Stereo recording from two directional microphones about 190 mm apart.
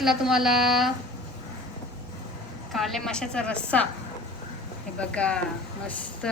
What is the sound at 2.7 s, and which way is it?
A woman's voice, centre (ahead or behind).